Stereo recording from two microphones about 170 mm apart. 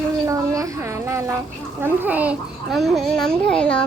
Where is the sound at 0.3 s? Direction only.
20° right (ahead or behind).